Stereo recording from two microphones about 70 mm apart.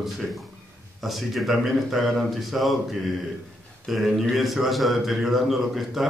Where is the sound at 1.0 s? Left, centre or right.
Centre.